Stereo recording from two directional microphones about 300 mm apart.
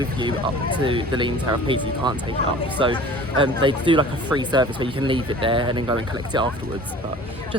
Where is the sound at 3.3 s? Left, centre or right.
Centre.